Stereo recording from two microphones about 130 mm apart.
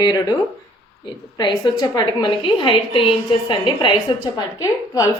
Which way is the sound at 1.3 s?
35° left (ahead or behind).